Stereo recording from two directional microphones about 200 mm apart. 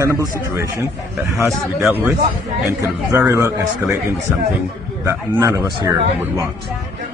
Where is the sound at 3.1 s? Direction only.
15° right (ahead or behind).